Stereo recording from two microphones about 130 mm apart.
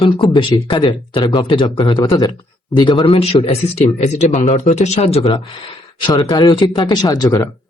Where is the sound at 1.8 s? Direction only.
25° left (ahead or behind).